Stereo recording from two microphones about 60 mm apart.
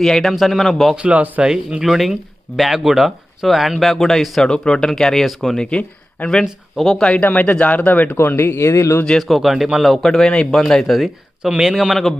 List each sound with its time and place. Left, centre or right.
0.0 s speech: centre
1.0 s speech: right
1.5 s speech: centre
5.6 s speech: centre
6.8 s speech: centre
7.2 s speech: left
9.3 s speech: centre